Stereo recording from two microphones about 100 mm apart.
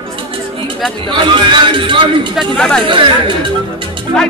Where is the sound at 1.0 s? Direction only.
55° right (ahead or behind).